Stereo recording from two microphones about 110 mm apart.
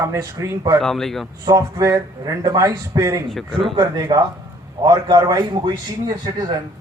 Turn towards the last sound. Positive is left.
turn(degrees=-40)  # may be behind; listen again after turning